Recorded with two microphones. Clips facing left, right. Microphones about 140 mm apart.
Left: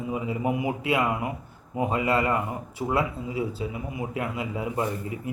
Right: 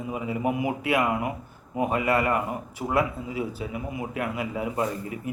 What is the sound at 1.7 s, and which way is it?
Speech, 25° left (ahead or behind).